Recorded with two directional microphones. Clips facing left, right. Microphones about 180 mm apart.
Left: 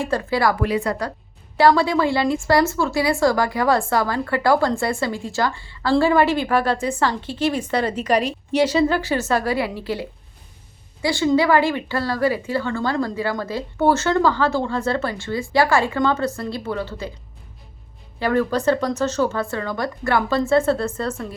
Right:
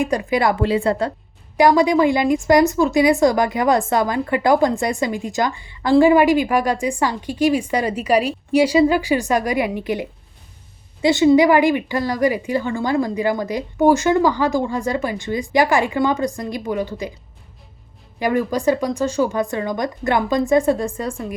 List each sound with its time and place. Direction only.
0.0 s a woman's voice: 15° right (ahead or behind)
18.2 s speech: 15° right (ahead or behind)